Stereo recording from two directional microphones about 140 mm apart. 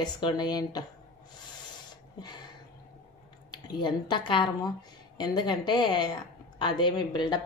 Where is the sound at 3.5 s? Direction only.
30° left (ahead or behind).